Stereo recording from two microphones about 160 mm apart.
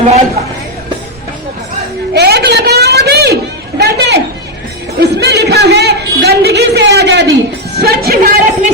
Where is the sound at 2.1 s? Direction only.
85° right.